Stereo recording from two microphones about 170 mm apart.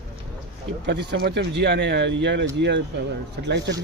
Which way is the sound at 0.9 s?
70° right (ahead or behind).